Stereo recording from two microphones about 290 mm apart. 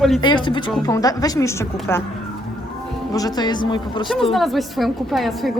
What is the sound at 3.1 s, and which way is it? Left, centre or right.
Speech, centre.